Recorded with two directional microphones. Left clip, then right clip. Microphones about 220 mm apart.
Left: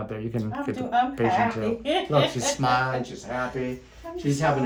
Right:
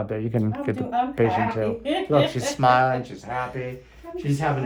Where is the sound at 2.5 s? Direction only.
15° right (ahead or behind).